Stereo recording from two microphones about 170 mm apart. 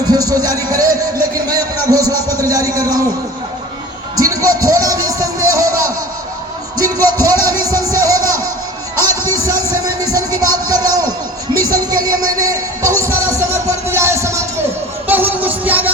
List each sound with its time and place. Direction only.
0.1 s speech: 20° right (ahead or behind)
4.1 s music: 20° right (ahead or behind)
9.8 s music: 20° right (ahead or behind)
12.2 s a sound: 20° right (ahead or behind)
13.0 s music: 15° right (ahead or behind)